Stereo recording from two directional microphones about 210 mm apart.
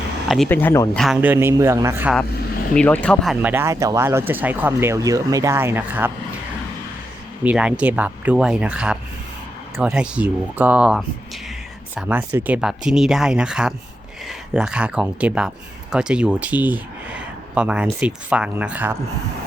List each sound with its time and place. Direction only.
0.3 s speech: 5° left (ahead or behind)
0.9 s speech: centre (ahead or behind)
2.7 s speech: 5° left (ahead or behind)
3.4 s speech: 10° right (ahead or behind)
7.4 s speech: 5° right (ahead or behind)